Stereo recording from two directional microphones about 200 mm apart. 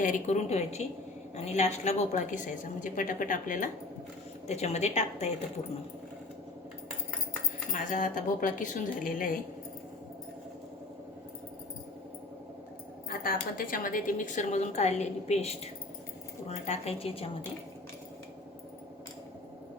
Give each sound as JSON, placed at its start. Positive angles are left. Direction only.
{"t": 0.0, "sound": "a woman's voice", "side_deg": 40}
{"t": 7.7, "sound": "a woman's voice", "side_deg": 40}
{"t": 13.2, "sound": "a woman's voice", "side_deg": 45}